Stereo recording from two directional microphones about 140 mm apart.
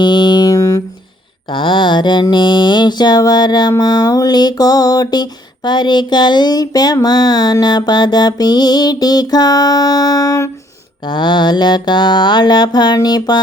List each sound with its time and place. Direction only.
0.0 s a sound: 35° left (ahead or behind)
1.5 s mantra: 35° left (ahead or behind)
11.0 s mantra: 35° left (ahead or behind)